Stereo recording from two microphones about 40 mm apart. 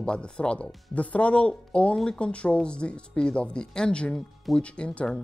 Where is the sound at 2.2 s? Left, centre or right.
Left.